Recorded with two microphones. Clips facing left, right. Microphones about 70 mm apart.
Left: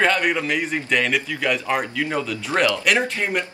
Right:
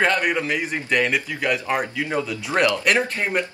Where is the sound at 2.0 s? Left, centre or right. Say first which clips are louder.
Even; centre.